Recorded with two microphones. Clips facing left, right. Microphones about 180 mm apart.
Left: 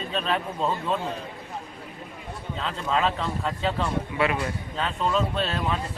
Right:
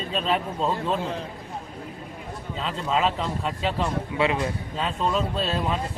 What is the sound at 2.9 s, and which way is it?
A man's voice, 20° right (ahead or behind).